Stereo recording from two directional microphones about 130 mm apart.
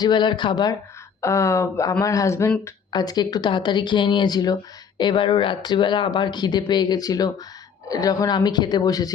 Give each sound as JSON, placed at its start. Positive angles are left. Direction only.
{"t": 0.0, "sound": "speech", "side_deg": 35}